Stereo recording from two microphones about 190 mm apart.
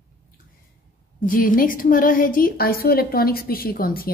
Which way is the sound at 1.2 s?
45° left (ahead or behind).